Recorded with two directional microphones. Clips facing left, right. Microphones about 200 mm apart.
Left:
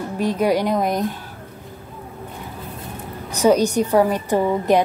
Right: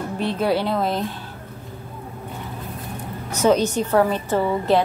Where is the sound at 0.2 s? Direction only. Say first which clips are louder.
Left 3 dB; 10° left (ahead or behind).